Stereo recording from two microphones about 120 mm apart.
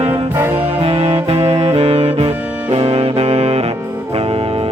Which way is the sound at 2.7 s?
55° right (ahead or behind).